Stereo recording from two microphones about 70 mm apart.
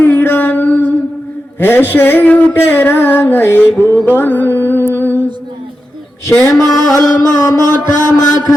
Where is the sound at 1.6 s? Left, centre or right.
Left.